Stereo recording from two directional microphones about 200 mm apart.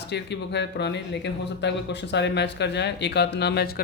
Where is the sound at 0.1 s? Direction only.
60° left (ahead or behind).